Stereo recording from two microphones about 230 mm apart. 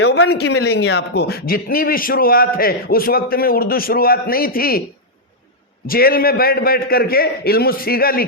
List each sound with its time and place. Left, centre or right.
0.3 s a man's voice: left
5.9 s a man's voice: left